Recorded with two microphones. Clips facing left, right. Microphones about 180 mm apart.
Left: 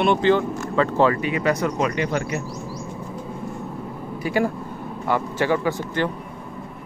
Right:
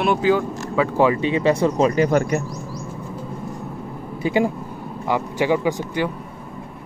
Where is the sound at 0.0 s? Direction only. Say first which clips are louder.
Even; 5° right (ahead or behind).